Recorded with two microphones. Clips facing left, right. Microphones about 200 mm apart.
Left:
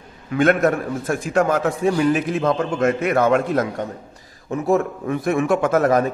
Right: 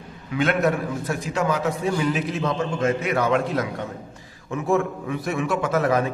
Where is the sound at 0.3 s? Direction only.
50° left (ahead or behind).